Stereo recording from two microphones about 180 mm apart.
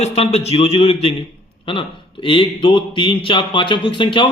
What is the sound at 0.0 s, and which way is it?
A man's voice, 35° left (ahead or behind).